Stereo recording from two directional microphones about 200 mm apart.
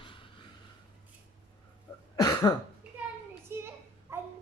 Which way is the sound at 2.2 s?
20° left (ahead or behind).